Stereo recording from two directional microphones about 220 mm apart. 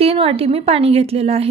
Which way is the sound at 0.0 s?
25° right (ahead or behind).